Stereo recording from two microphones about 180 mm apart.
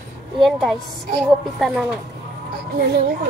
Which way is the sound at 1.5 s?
Centre (ahead or behind).